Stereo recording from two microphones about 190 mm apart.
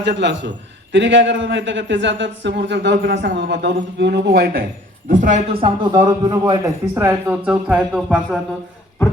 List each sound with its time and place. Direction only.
0.0 s a man's voice: 65° right (ahead or behind)
5.0 s speech: 45° right (ahead or behind)
5.5 s a man's voice: 30° right (ahead or behind); by 8.4 s centre (ahead or behind)